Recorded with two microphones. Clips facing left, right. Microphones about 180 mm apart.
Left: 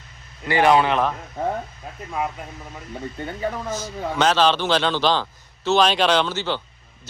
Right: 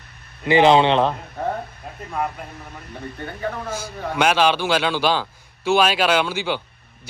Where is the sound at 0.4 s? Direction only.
20° right (ahead or behind).